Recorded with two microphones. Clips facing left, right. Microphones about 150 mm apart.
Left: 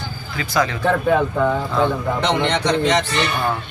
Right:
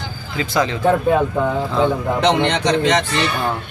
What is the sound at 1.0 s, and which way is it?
Speech, 10° right (ahead or behind).